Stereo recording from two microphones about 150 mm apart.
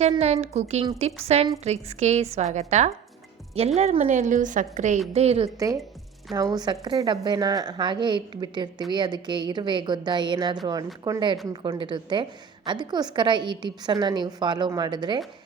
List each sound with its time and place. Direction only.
0.1 s a woman's voice: 45° right (ahead or behind)
5.5 s a woman's voice: 20° right (ahead or behind)